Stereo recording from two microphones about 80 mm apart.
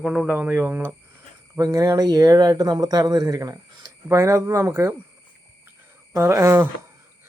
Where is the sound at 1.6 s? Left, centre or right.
Right.